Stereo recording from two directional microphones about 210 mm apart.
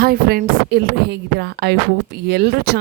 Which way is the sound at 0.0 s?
45° right (ahead or behind).